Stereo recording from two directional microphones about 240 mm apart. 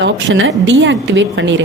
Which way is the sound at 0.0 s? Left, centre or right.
Right.